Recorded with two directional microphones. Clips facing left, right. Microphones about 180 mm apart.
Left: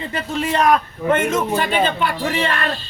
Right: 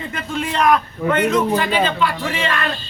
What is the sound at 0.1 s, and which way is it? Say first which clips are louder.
Speech: left 4 dB; 40° left (ahead or behind).